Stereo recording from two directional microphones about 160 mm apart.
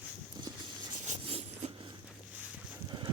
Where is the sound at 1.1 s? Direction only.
40° right (ahead or behind).